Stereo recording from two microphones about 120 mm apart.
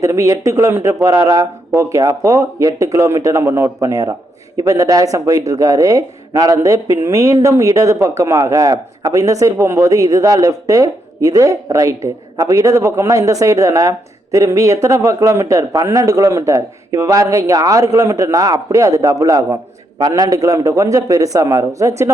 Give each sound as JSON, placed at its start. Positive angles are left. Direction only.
{"t": 0.0, "sound": "speech", "side_deg": -25}